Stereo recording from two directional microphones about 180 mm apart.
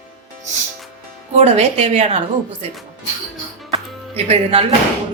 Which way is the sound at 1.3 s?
35° right (ahead or behind).